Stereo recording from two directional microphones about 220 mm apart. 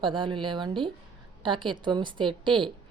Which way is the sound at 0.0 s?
20° right (ahead or behind).